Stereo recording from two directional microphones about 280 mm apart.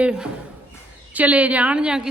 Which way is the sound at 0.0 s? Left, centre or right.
Centre.